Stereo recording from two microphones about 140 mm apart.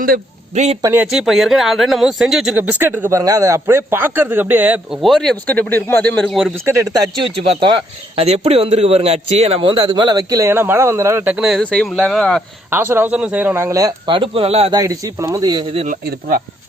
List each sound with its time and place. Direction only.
0.5 s a man's voice: 55° right (ahead or behind)
1.0 s speech: centre (ahead or behind)
5.0 s speech: centre (ahead or behind)
7.3 s speech: 40° right (ahead or behind); by 11.3 s 15° right (ahead or behind)
11.3 s speech: centre (ahead or behind)
12.7 s speech: 15° right (ahead or behind)
14.1 s speech: 40° right (ahead or behind)
14.7 s speech: 25° right (ahead or behind)